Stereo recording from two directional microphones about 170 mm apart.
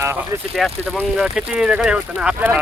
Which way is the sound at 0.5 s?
Centre (ahead or behind).